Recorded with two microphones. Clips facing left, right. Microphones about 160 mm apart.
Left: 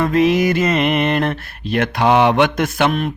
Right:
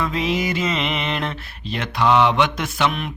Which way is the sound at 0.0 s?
50° left (ahead or behind).